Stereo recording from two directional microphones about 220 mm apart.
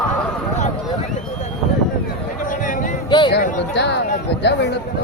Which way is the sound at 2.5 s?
35° left (ahead or behind).